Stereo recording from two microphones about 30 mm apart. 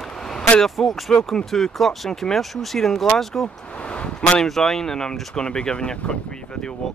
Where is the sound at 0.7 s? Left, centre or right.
Centre; by 6.1 s left.